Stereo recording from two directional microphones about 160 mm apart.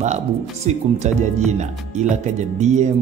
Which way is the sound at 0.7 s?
45° right (ahead or behind).